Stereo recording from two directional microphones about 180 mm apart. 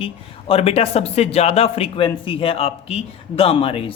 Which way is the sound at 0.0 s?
30° left (ahead or behind).